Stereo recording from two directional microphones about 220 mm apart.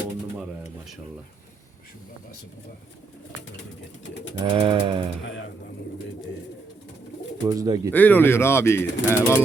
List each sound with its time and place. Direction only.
4.4 s pigeon: 20° right (ahead or behind)
7.4 s speech: 15° right (ahead or behind)
7.9 s speech: 10° left (ahead or behind)